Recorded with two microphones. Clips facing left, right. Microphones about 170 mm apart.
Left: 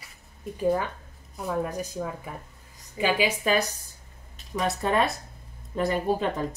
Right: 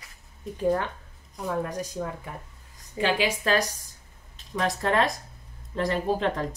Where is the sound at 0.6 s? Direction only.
5° left (ahead or behind).